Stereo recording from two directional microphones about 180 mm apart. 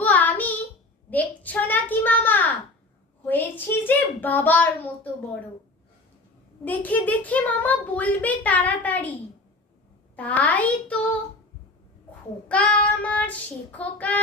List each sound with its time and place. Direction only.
0.0 s child singing: 10° left (ahead or behind)
1.1 s a sound: 10° left (ahead or behind)
6.7 s a child's voice: 10° left (ahead or behind)
10.2 s a child's voice: 10° left (ahead or behind)
12.5 s a child's voice: 5° left (ahead or behind)